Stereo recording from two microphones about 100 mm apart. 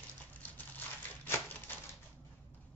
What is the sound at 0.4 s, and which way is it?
Crumpling, 20° left (ahead or behind).